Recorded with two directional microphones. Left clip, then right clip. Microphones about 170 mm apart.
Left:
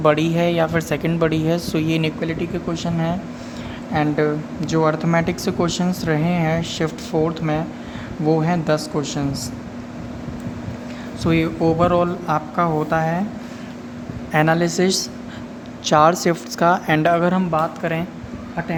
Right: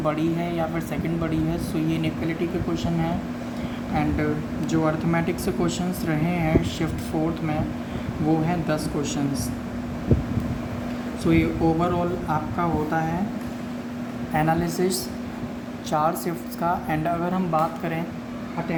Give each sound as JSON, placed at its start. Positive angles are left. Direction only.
{"t": 0.0, "sound": "a man's voice", "side_deg": 65}
{"t": 8.4, "sound": "a man's voice", "side_deg": 65}
{"t": 11.2, "sound": "speech", "side_deg": 70}
{"t": 14.3, "sound": "a man's voice", "side_deg": 55}